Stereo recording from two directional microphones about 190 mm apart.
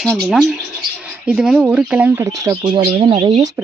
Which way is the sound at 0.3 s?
Centre (ahead or behind).